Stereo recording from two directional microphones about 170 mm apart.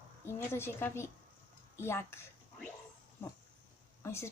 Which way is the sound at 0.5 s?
15° left (ahead or behind).